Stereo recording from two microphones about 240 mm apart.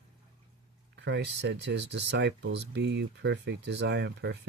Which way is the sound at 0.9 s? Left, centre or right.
Right.